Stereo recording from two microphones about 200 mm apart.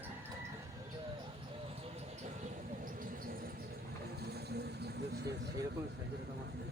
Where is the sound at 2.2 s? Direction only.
35° right (ahead or behind).